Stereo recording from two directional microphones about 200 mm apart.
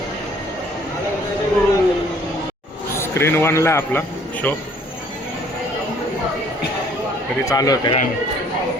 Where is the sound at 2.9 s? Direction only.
10° left (ahead or behind).